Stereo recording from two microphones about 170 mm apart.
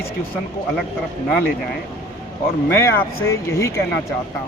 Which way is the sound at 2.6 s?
15° left (ahead or behind).